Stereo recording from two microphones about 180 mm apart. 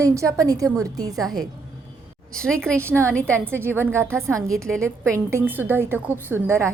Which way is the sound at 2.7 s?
15° right (ahead or behind).